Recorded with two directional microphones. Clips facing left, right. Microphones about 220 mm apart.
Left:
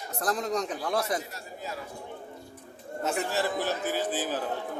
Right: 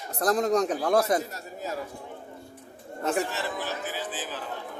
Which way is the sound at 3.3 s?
45° left (ahead or behind).